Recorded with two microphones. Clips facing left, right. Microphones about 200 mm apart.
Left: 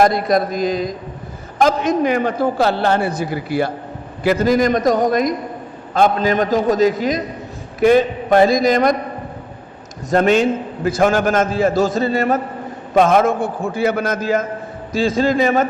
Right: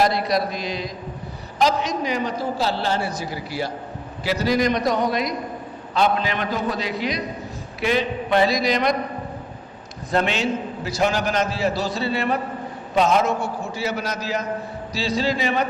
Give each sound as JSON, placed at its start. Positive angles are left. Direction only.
{"t": 0.0, "sound": "a man's voice", "side_deg": 50}
{"t": 10.1, "sound": "a man's voice", "side_deg": 45}